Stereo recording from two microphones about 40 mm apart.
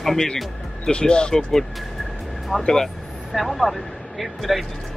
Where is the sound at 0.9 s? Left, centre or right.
Left.